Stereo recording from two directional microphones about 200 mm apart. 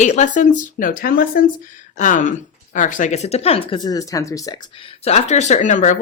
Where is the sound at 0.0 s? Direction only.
35° left (ahead or behind).